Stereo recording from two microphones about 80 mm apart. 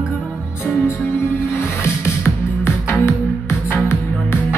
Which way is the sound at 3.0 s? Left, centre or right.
Left.